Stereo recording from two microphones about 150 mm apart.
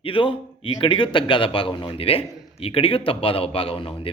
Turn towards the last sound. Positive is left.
turn(degrees=35)  # may be behind; listen again after turning